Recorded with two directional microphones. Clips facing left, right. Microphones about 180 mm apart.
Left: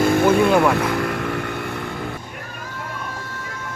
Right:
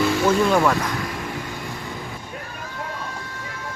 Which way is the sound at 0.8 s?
60° left (ahead or behind).